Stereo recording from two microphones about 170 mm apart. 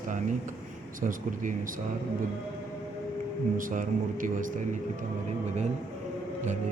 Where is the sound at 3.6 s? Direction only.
50° right (ahead or behind).